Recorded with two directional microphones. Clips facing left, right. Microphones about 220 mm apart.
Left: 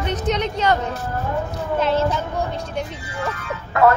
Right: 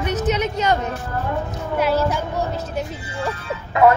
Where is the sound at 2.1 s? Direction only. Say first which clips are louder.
Right 1 dB; 5° right (ahead or behind).